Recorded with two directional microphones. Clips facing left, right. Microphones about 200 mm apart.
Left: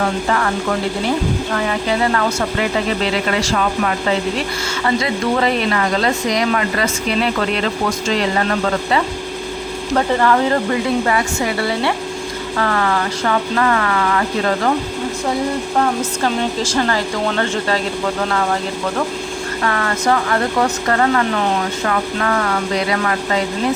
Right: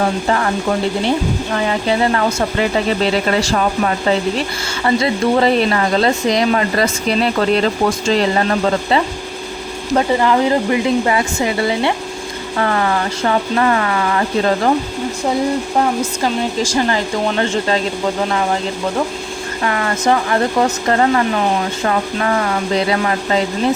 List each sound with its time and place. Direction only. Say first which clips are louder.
0.3 s speech: right 2 dB; 25° right (ahead or behind)
1.5 s speech: right 4 dB; 25° right (ahead or behind)
9.9 s speech: right 1 dB; 15° right (ahead or behind)
16.2 s speech: even; 15° right (ahead or behind)
19.6 s speech: right 2 dB; 20° right (ahead or behind)